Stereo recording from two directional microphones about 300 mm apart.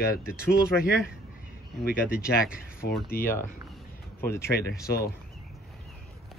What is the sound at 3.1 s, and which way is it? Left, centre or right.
Speech, centre.